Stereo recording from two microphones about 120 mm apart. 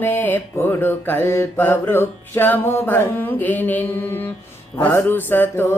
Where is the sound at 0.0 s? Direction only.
15° left (ahead or behind).